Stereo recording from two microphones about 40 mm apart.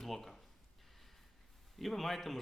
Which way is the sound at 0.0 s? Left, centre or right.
Centre.